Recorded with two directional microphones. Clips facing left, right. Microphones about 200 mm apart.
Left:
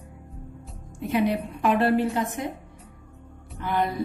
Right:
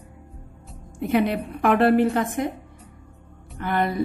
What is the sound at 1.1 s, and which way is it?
A woman's voice, 60° right (ahead or behind).